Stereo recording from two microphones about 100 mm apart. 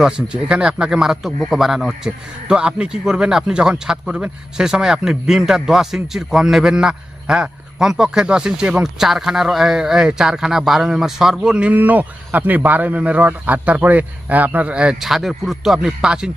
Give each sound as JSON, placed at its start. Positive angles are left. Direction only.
{"t": 0.0, "sound": "a man's voice", "side_deg": -10}